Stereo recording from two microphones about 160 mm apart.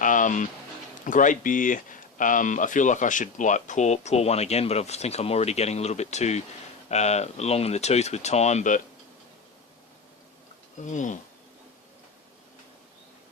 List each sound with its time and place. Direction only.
0.0 s music: 55° left (ahead or behind)
1.0 s speech: 55° left (ahead or behind)
10.9 s speech: 50° left (ahead or behind)